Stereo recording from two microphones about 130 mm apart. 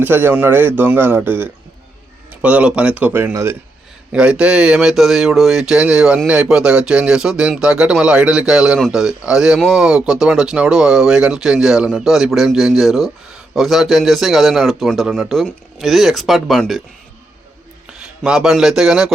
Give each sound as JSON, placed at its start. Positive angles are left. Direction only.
{"t": 0.0, "sound": "speech", "side_deg": -15}
{"t": 4.1, "sound": "speech", "side_deg": -10}
{"t": 17.9, "sound": "speech", "side_deg": -5}